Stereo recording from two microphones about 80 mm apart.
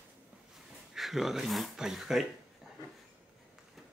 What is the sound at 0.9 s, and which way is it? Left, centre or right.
Speech, centre.